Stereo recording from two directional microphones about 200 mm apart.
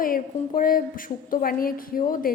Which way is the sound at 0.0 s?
45° left (ahead or behind).